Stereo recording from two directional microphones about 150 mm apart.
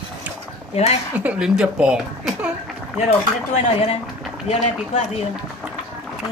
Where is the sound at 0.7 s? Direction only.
45° left (ahead or behind).